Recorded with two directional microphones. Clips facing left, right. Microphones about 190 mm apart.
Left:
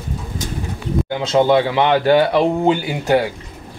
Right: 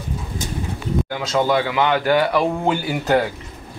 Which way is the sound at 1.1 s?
25° left (ahead or behind).